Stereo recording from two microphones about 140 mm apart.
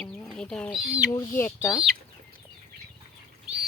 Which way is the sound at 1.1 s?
15° left (ahead or behind).